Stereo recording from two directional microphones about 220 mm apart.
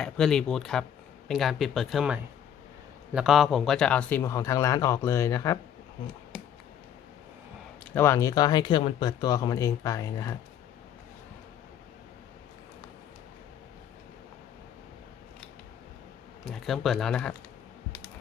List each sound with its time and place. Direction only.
0.0 s speech: centre (ahead or behind)
3.2 s speech: centre (ahead or behind); by 5.5 s 15° left (ahead or behind)
7.9 s speech: 10° left (ahead or behind)
16.5 s speech: centre (ahead or behind)